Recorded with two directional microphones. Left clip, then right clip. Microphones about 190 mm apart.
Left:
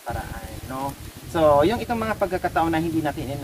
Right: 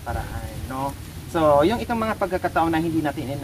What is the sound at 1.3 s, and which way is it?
Speech, 15° right (ahead or behind).